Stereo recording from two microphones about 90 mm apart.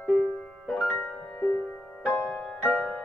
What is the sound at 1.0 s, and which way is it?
Music, 20° left (ahead or behind).